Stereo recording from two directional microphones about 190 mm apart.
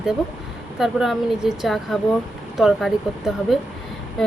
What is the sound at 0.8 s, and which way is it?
Speech, centre (ahead or behind).